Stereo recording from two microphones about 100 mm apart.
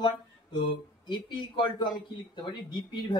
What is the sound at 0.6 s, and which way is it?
Speech, 50° left (ahead or behind).